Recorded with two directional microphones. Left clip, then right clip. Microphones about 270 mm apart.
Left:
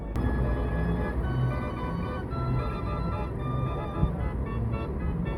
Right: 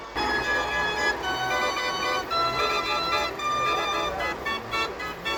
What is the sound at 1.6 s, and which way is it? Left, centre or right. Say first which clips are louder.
Music: right 9 dB; right.